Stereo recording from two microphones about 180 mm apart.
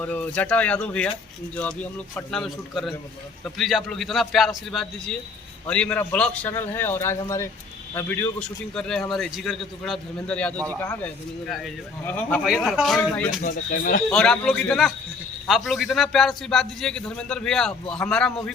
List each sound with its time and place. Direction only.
0.0 s a man's voice: 10° left (ahead or behind)
13.4 s speech: 50° left (ahead or behind)
14.1 s a man's voice: 5° left (ahead or behind)